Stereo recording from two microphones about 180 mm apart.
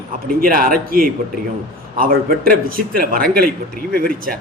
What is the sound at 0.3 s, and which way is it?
A man's voice, 55° right (ahead or behind).